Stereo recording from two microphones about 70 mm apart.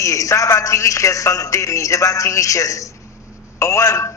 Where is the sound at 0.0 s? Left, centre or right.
Left.